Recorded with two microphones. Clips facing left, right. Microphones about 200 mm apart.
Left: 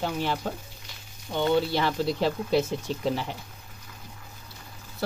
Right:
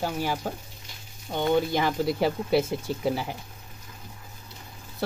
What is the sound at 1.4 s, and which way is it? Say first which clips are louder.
Speech: even; 15° right (ahead or behind).